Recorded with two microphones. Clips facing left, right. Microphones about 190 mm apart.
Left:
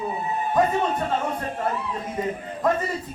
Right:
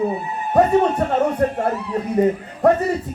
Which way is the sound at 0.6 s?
65° right (ahead or behind).